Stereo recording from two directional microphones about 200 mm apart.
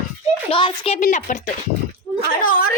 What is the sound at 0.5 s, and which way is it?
Speech, 30° left (ahead or behind).